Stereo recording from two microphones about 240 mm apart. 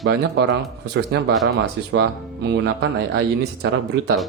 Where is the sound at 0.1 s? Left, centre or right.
Right.